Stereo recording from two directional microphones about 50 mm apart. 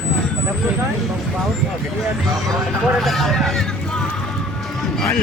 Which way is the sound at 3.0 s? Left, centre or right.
Centre.